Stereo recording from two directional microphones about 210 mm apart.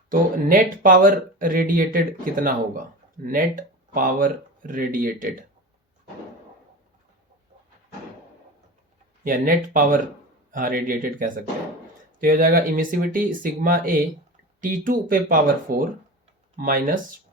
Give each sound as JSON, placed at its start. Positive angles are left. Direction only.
{"t": 0.1, "sound": "speech", "side_deg": -40}
{"t": 9.7, "sound": "speech", "side_deg": -40}